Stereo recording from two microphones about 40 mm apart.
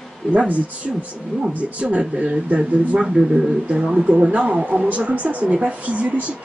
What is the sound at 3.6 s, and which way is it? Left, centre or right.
Speech, right.